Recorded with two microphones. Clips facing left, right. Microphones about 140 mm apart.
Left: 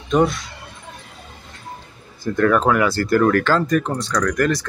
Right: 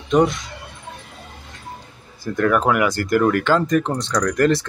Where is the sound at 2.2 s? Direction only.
10° right (ahead or behind).